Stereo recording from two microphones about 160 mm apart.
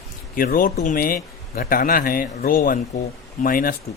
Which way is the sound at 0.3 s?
65° left (ahead or behind).